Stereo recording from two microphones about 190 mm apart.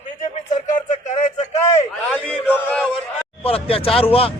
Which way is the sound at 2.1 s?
10° left (ahead or behind).